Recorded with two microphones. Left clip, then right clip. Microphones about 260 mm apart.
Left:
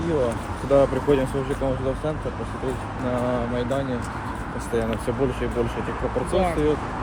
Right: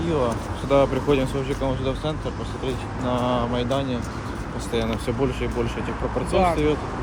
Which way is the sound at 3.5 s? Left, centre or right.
Centre.